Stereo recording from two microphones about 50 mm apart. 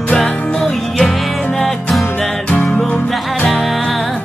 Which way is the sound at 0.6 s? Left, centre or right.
Centre.